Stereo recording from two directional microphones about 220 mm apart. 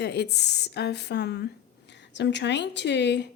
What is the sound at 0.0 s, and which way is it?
A woman's voice, 50° left (ahead or behind).